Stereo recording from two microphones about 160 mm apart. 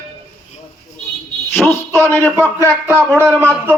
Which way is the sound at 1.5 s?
15° left (ahead or behind).